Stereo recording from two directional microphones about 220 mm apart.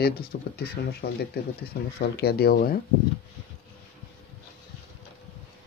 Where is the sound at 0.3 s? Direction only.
45° left (ahead or behind).